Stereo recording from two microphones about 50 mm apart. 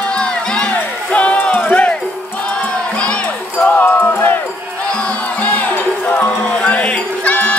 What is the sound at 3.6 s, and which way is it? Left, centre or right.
Music, left.